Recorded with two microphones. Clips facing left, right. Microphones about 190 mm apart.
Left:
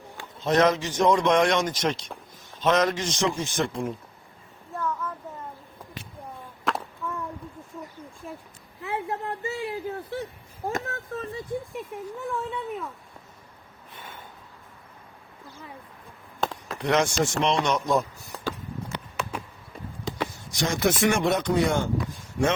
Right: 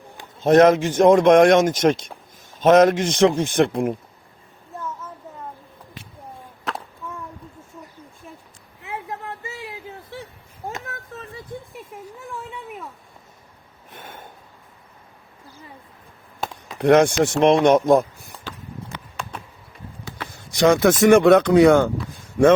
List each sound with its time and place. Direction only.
0.4 s a man's voice: 50° right (ahead or behind)
8.8 s a sound: 35° left (ahead or behind)
10.8 s a sound: 30° left (ahead or behind)
13.9 s snort: 50° right (ahead or behind)
16.8 s speech: 55° right (ahead or behind)
20.6 s a man's voice: 65° right (ahead or behind)